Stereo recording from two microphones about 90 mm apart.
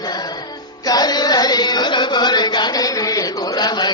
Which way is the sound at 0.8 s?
45° left (ahead or behind).